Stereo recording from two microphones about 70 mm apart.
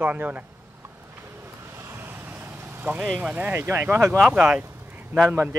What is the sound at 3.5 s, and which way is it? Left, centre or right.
Speech, right.